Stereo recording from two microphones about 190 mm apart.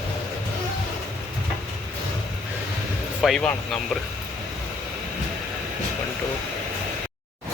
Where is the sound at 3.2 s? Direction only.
Centre (ahead or behind).